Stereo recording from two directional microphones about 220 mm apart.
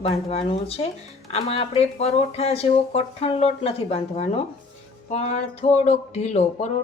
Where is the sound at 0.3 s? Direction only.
25° left (ahead or behind).